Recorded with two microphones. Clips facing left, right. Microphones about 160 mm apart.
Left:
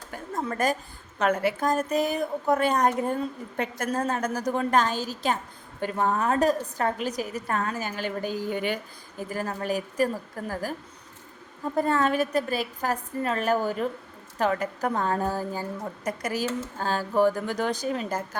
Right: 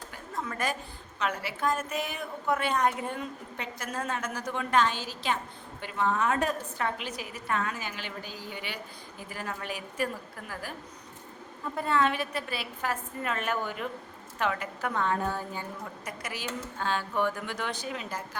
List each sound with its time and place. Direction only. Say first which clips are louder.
0.4 s a woman's voice: left 7 dB; 40° left (ahead or behind)
11.8 s a woman's voice: left 4 dB; 40° left (ahead or behind)